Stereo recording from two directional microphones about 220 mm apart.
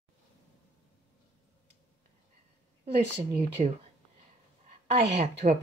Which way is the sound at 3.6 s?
30° right (ahead or behind).